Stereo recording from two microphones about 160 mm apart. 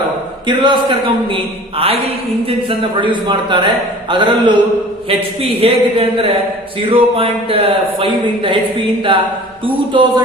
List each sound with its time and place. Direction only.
0.4 s a man's voice: 30° right (ahead or behind)
2.6 s a man's voice: 30° right (ahead or behind)